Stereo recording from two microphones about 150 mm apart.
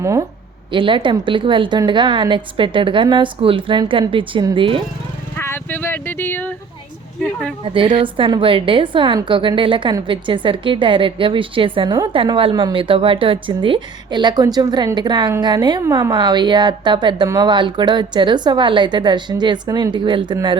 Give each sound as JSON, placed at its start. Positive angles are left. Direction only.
{"t": 0.0, "sound": "a woman's voice", "side_deg": -20}
{"t": 0.7, "sound": "a woman's voice", "side_deg": -35}
{"t": 5.4, "sound": "a sound", "side_deg": 15}
{"t": 7.6, "sound": "a woman's voice", "side_deg": -35}